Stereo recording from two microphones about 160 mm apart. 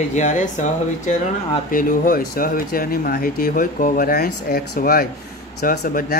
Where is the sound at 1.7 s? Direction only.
60° left (ahead or behind).